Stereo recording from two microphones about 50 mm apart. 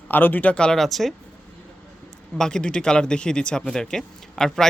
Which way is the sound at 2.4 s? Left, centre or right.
Centre.